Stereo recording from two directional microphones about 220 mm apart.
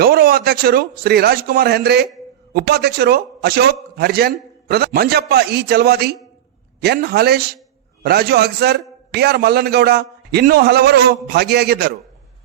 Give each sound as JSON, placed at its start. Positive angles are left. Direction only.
{"t": 0.0, "sound": "a man's voice", "side_deg": -45}